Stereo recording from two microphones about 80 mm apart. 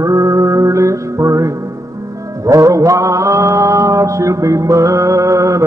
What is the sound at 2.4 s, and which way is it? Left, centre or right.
Mantra, right.